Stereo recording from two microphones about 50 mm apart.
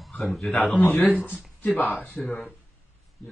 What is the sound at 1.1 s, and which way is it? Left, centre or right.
Speech, left.